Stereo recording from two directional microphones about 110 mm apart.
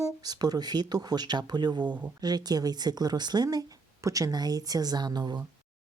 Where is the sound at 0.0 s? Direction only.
35° right (ahead or behind).